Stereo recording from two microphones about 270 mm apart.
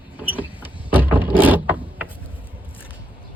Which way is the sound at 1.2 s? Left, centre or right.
Centre.